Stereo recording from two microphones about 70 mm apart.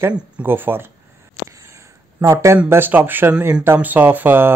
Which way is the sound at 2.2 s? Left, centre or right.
Right.